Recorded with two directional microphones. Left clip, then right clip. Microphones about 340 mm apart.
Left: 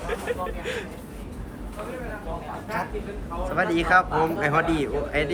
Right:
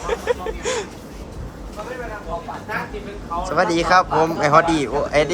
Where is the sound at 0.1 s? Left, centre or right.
Centre.